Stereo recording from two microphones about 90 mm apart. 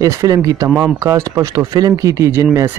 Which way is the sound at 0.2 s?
40° right (ahead or behind).